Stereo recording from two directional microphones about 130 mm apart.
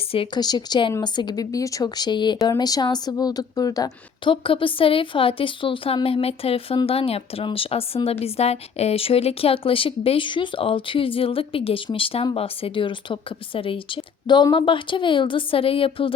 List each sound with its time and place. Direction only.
0.3 s speech: 30° left (ahead or behind)
4.2 s speech: 40° left (ahead or behind)